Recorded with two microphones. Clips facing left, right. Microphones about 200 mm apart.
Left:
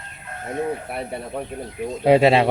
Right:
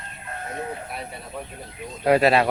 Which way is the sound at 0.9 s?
60° left (ahead or behind).